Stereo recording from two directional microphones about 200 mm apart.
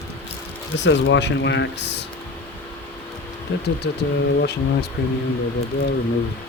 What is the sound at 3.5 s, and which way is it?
Speech, 65° left (ahead or behind).